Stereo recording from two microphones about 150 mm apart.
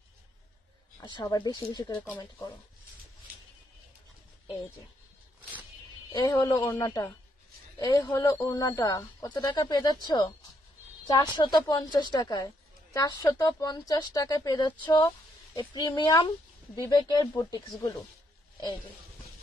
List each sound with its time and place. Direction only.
1.0 s a woman's voice: 30° left (ahead or behind)
6.1 s a woman's voice: 25° left (ahead or behind)